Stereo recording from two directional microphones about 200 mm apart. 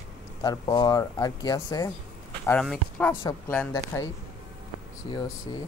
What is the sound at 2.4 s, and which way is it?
Speech, 5° left (ahead or behind).